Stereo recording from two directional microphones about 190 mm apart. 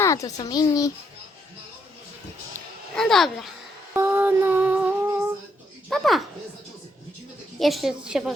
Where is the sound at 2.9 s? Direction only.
Centre (ahead or behind).